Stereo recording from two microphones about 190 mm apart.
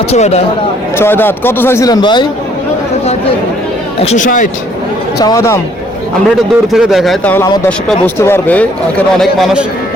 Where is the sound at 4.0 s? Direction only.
35° left (ahead or behind).